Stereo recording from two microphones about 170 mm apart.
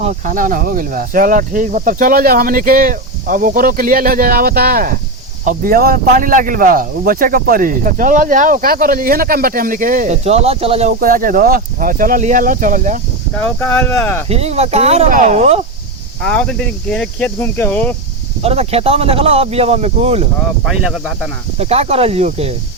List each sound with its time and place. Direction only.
0.0 s speech: 50° right (ahead or behind)
11.0 s speech: 55° right (ahead or behind)
13.3 s speech: 5° left (ahead or behind)
14.3 s speech: 35° right (ahead or behind)
16.2 s speech: 5° left (ahead or behind)
18.4 s speech: 35° right (ahead or behind)
20.7 s speech: centre (ahead or behind)
21.6 s speech: 35° right (ahead or behind)